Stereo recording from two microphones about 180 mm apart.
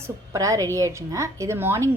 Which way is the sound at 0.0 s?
20° right (ahead or behind).